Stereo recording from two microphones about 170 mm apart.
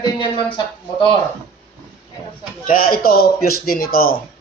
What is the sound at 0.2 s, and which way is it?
Speech, 30° left (ahead or behind).